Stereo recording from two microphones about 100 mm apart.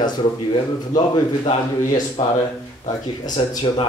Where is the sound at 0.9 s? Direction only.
55° left (ahead or behind).